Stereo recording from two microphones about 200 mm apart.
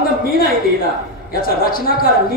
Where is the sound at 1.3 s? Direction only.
45° left (ahead or behind).